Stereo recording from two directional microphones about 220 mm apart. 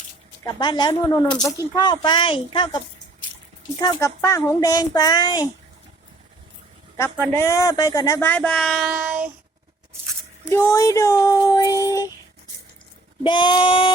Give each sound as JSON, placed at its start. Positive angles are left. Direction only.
{"t": 0.4, "sound": "speech", "side_deg": 20}
{"t": 6.9, "sound": "speech", "side_deg": 10}
{"t": 10.5, "sound": "speech", "side_deg": 15}
{"t": 13.2, "sound": "speech", "side_deg": 20}